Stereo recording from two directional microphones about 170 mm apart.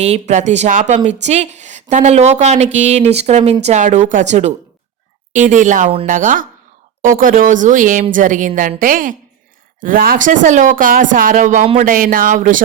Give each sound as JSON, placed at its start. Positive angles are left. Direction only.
{"t": 0.0, "sound": "a woman's voice", "side_deg": -40}
{"t": 11.9, "sound": "a woman's voice", "side_deg": -55}